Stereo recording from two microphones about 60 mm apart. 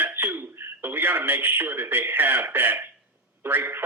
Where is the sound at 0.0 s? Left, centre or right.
Right.